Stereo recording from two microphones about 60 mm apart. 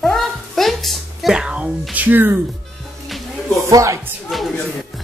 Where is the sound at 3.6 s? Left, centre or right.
Right.